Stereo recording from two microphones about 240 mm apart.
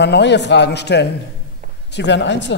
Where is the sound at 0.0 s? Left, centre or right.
Left.